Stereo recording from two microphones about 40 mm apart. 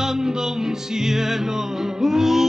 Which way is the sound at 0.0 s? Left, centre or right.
Centre.